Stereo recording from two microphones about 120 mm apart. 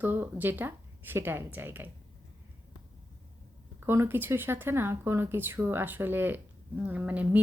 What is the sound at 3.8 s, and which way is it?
Speech, 20° right (ahead or behind).